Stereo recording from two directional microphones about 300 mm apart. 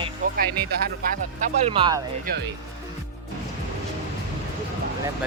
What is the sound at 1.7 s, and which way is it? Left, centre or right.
Speech, centre.